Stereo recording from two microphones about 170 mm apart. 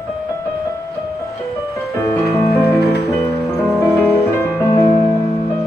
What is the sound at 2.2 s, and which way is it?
Music, 75° left (ahead or behind).